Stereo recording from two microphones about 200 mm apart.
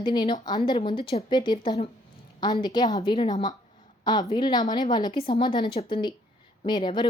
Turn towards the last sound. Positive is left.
turn(degrees=25)  # may be behind; listen again after turning